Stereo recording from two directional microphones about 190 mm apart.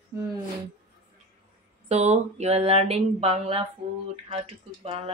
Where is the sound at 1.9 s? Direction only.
35° right (ahead or behind).